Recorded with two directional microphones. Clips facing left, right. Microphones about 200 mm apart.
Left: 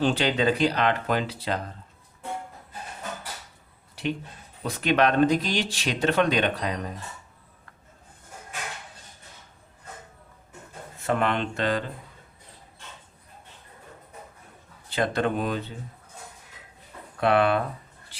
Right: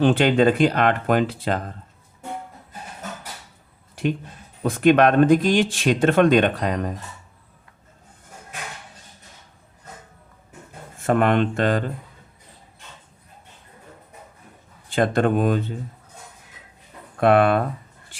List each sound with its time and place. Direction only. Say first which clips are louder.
0.0 s speech: right 7 dB; 55° right (ahead or behind)
4.0 s a sound: right 5 dB; 45° right (ahead or behind)
4.6 s speech: right 7 dB; 50° right (ahead or behind)
11.0 s speech: right 7 dB; 50° right (ahead or behind)
14.8 s speech: right 6 dB; 50° right (ahead or behind)
17.2 s speech: right 5 dB; 50° right (ahead or behind)